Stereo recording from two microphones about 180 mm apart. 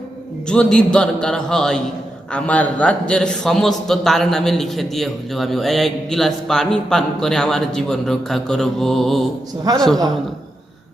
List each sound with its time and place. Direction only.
0.4 s a man's voice: 5° left (ahead or behind)
9.7 s a woman's voice: 20° right (ahead or behind)